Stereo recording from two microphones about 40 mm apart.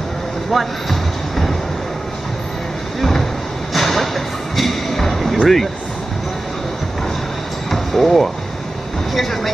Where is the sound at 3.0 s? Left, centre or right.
Centre.